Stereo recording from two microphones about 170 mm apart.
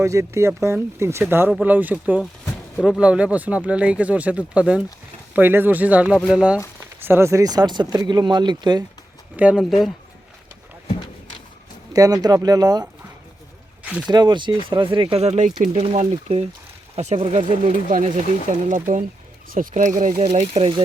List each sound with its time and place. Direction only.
0.0 s speech: 15° right (ahead or behind)
9.3 s speech: 5° right (ahead or behind)
11.9 s speech: 20° right (ahead or behind)
14.1 s speech: 25° right (ahead or behind)